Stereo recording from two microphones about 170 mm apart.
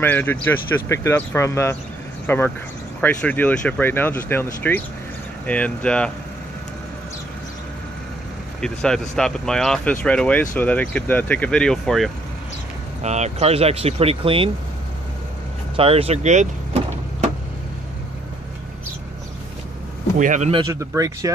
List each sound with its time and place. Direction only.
0.0 s speech: 10° left (ahead or behind)
8.5 s speech: 5° left (ahead or behind)
13.0 s speech: 40° right (ahead or behind)
15.7 s speech: 35° right (ahead or behind)
20.2 s speech: 45° right (ahead or behind)
20.5 s speech: 20° right (ahead or behind)